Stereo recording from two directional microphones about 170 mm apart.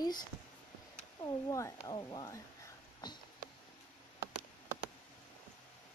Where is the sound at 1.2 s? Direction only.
20° left (ahead or behind).